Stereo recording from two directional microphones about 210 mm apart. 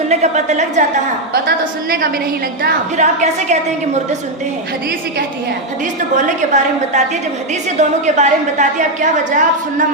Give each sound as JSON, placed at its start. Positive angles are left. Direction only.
{"t": 0.1, "sound": "a woman's voice", "side_deg": -30}
{"t": 2.6, "sound": "a woman's voice", "side_deg": -35}
{"t": 6.1, "sound": "a woman's voice", "side_deg": -35}